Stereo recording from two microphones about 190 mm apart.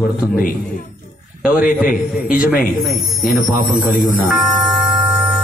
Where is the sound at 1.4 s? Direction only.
45° left (ahead or behind).